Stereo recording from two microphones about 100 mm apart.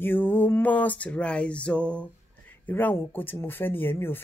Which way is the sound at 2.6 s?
20° left (ahead or behind).